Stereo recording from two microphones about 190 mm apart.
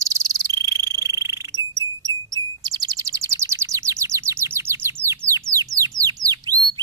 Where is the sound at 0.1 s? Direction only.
20° right (ahead or behind).